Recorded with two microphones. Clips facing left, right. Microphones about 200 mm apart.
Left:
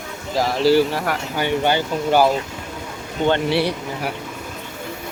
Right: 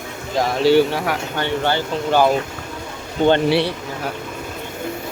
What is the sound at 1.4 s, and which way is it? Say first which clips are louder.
Speech: left 2 dB; 15° left (ahead or behind).